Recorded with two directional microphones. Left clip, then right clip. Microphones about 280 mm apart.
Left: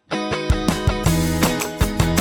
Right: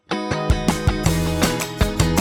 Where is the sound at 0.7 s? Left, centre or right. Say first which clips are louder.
Left 1 dB; centre.